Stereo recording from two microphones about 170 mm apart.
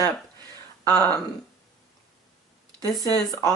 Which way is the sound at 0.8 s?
10° left (ahead or behind).